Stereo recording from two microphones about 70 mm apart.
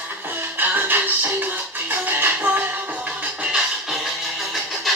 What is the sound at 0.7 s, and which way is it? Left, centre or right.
Music, right.